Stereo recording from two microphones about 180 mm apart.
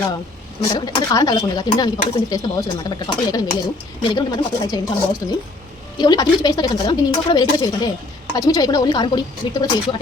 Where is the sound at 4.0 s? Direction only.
25° left (ahead or behind).